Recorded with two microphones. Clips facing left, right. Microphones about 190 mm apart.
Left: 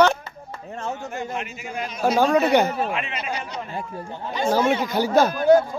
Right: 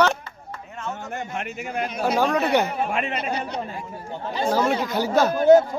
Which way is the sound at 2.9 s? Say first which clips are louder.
Right 2 dB; 45° right (ahead or behind).